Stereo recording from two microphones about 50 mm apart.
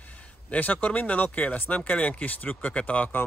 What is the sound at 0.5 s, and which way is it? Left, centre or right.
Speech, left.